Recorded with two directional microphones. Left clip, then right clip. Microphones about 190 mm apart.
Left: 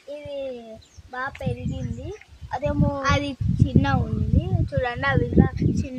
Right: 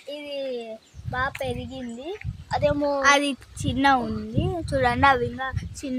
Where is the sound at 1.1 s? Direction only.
35° right (ahead or behind).